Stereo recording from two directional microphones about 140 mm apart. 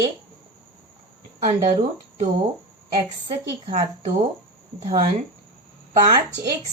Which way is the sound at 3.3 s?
40° right (ahead or behind).